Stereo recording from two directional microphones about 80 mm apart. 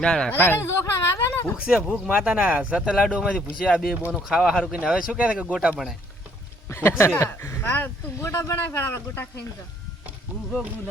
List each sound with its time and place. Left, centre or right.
0.0 s speech: centre
0.3 s speech: left
1.5 s speech: centre
6.7 s speech: left